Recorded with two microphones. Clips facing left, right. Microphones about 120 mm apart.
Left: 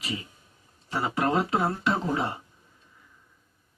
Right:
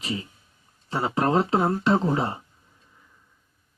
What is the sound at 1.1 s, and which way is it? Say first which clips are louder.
Speech: right 4 dB; 35° right (ahead or behind).